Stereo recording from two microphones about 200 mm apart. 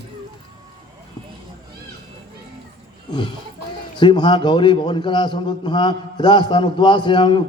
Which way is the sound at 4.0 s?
25° left (ahead or behind).